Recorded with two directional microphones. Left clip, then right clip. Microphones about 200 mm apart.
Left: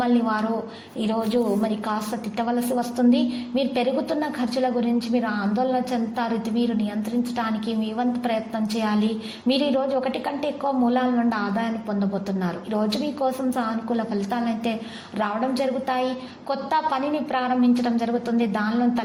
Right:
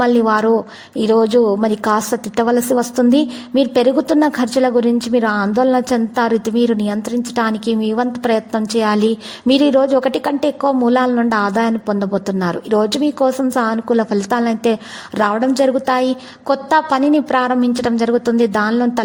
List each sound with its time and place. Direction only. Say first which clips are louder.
0.0 s a woman's voice: right 10 dB; 50° right (ahead or behind)